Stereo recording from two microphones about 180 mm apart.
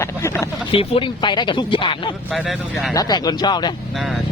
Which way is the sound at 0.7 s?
30° left (ahead or behind).